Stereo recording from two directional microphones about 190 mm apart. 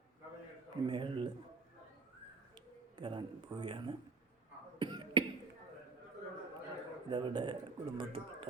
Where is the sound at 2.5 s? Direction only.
25° right (ahead or behind).